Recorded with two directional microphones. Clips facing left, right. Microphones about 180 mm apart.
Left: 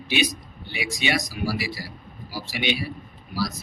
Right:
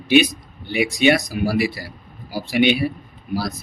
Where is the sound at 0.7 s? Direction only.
55° right (ahead or behind).